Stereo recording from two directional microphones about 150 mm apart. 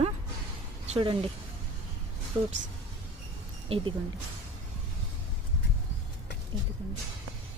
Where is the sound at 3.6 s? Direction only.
40° right (ahead or behind).